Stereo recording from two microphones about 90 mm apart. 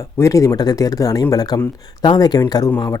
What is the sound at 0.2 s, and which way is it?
Speech, 35° left (ahead or behind).